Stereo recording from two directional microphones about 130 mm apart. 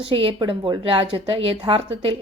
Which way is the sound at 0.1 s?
45° right (ahead or behind).